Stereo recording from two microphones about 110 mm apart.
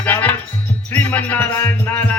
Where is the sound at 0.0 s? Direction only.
15° left (ahead or behind).